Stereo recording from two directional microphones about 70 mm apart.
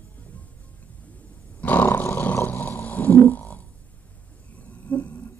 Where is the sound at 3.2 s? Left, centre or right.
Left.